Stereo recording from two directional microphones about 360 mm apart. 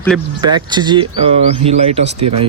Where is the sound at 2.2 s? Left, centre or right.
Right.